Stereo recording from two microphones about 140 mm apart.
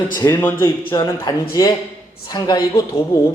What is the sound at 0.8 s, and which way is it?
A man's voice, 35° left (ahead or behind).